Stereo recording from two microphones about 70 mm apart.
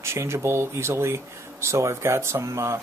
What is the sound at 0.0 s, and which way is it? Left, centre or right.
Speech, right.